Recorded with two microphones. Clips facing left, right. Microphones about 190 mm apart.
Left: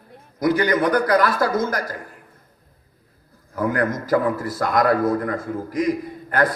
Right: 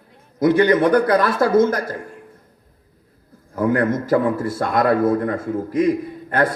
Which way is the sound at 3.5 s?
25° right (ahead or behind).